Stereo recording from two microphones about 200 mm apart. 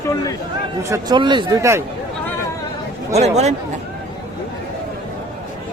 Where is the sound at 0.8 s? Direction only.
20° right (ahead or behind).